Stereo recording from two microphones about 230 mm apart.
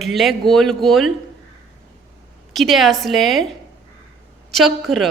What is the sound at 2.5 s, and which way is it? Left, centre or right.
Speech, centre.